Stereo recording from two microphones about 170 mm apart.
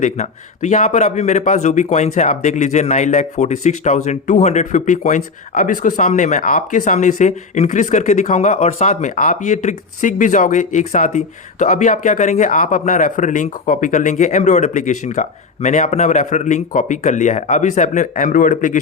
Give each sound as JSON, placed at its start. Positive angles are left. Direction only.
{"t": 0.0, "sound": "a man's voice", "side_deg": 45}